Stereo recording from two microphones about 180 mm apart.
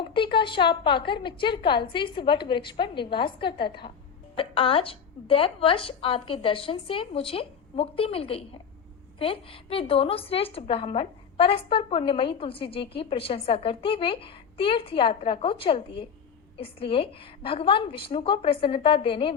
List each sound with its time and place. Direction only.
0.0 s a woman's voice: 25° left (ahead or behind)